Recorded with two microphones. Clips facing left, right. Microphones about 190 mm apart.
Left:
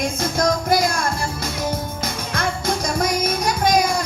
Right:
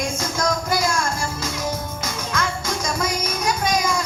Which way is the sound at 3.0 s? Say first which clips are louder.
Left 4 dB; 60° left (ahead or behind).